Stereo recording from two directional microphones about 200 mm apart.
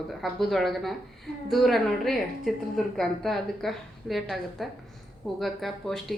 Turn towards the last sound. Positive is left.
turn(degrees=0)  # may be behind; listen again after turning